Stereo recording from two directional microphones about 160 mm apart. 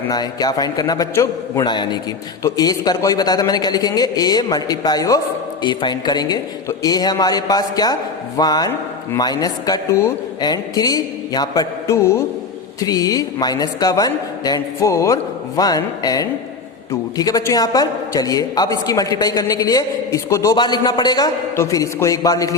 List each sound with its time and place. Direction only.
0.1 s a woman's voice: 25° left (ahead or behind)